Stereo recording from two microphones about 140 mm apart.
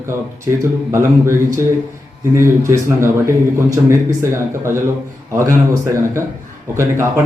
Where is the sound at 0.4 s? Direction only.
20° right (ahead or behind).